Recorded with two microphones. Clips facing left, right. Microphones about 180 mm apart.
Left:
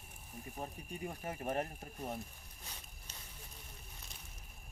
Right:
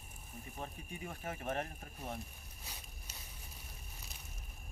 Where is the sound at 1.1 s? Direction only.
15° left (ahead or behind).